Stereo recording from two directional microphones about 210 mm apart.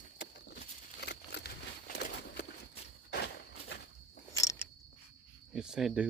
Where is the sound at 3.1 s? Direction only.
50° left (ahead or behind).